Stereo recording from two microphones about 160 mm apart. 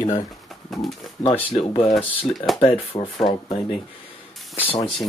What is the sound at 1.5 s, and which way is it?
Speech, 35° left (ahead or behind).